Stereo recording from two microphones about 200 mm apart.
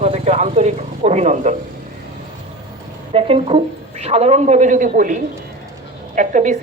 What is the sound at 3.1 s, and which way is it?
Speech, 30° right (ahead or behind).